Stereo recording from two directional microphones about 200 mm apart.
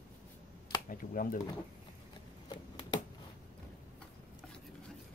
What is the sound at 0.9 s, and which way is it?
Speech, 45° left (ahead or behind).